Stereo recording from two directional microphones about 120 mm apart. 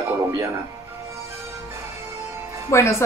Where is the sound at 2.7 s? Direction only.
25° left (ahead or behind).